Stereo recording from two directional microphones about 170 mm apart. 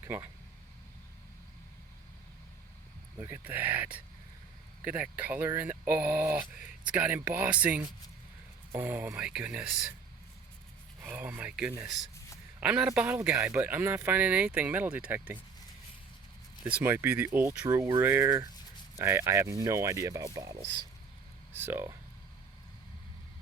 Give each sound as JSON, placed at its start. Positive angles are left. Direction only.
{"t": 0.0, "sound": "speech", "side_deg": -15}
{"t": 3.2, "sound": "speech", "side_deg": -10}
{"t": 11.0, "sound": "speech", "side_deg": -10}
{"t": 16.6, "sound": "speech", "side_deg": -10}
{"t": 17.7, "sound": "speech", "side_deg": -20}